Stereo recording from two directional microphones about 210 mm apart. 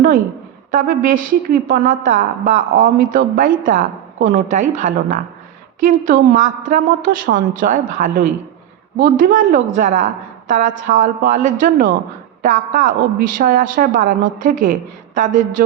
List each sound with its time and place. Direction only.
0.7 s speech: 40° right (ahead or behind)